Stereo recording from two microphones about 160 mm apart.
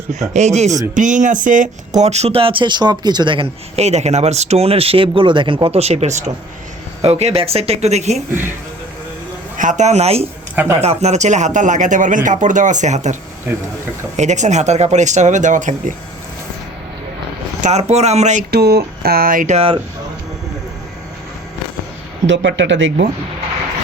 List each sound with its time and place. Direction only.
0.1 s speech: 45° right (ahead or behind); by 3.4 s 30° right (ahead or behind)
3.8 s speech: 45° right (ahead or behind)
8.3 s speech: 15° right (ahead or behind)
9.6 s speech: 50° right (ahead or behind)
10.5 s speech: 10° right (ahead or behind)
10.8 s speech: 40° right (ahead or behind)
14.2 s speech: 50° right (ahead or behind)
17.6 s speech: 45° right (ahead or behind)
18.5 s speech: 90° right; by 19.5 s 60° right (ahead or behind)
19.5 s speech: 35° right (ahead or behind)
22.2 s speech: 20° right (ahead or behind)